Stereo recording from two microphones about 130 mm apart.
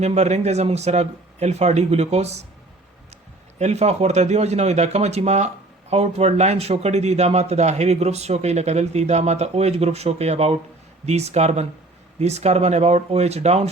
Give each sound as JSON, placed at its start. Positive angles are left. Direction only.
{"t": 0.0, "sound": "speech", "side_deg": -55}
{"t": 3.6, "sound": "speech", "side_deg": -55}